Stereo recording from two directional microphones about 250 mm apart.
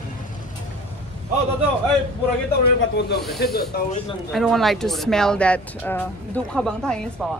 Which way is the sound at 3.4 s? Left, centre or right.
Left.